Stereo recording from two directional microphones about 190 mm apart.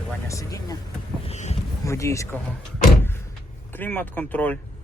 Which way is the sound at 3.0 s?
10° left (ahead or behind).